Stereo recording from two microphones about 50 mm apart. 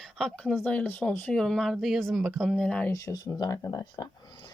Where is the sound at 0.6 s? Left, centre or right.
Left.